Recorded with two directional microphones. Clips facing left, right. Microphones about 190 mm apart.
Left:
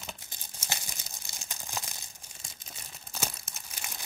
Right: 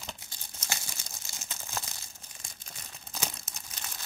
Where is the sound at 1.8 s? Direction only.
15° left (ahead or behind).